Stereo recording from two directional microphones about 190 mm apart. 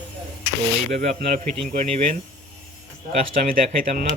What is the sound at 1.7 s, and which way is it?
Speech, 45° right (ahead or behind).